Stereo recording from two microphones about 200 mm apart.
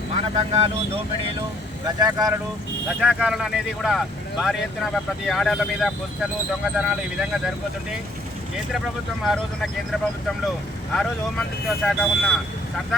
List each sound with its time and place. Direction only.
0.3 s speech: 35° right (ahead or behind)
2.0 s speech: 20° right (ahead or behind)
3.0 s speech: 5° right (ahead or behind)
9.2 s speech: centre (ahead or behind)
10.9 s speech: centre (ahead or behind)